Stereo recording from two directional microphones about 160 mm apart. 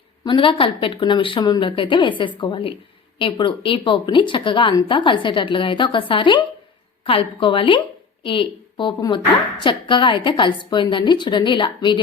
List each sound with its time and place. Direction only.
0.3 s a woman's voice: 30° left (ahead or behind)